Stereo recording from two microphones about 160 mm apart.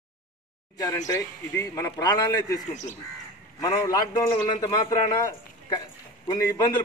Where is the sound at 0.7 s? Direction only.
20° left (ahead or behind).